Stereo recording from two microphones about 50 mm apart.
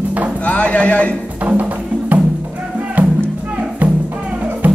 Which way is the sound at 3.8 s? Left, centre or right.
Right.